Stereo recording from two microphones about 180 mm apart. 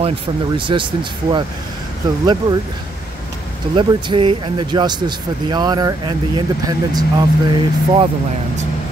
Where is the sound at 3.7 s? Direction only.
25° right (ahead or behind).